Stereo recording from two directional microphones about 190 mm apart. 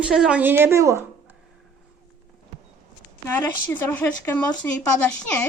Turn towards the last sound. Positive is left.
turn(degrees=5)  # may be behind; listen again after turning